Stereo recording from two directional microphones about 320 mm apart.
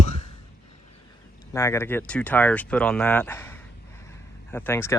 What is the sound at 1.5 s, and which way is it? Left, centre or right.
Speech, centre.